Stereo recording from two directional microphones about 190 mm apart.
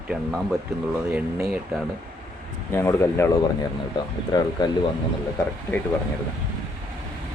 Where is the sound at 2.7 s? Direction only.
15° left (ahead or behind).